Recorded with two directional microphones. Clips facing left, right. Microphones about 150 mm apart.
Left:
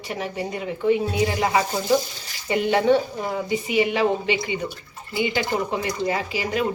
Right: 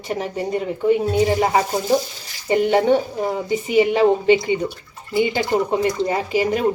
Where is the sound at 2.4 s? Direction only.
30° right (ahead or behind).